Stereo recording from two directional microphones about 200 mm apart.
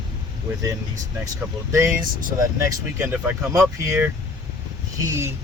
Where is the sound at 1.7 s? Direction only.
15° right (ahead or behind).